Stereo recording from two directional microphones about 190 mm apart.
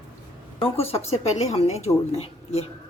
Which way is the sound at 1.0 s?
35° left (ahead or behind).